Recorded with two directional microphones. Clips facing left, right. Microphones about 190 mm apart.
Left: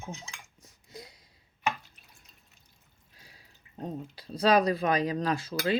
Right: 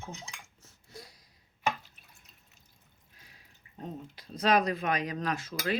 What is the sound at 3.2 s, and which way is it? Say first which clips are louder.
Speech: left 3 dB; 30° left (ahead or behind).